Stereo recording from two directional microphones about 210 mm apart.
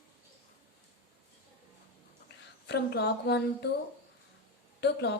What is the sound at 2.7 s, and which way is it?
A woman's voice, 50° left (ahead or behind).